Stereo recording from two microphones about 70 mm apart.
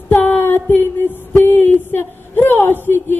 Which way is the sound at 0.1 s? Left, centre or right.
Left.